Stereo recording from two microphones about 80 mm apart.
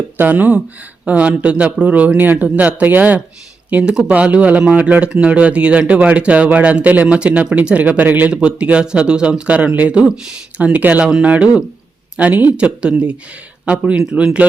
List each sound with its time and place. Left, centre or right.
0.2 s speech: right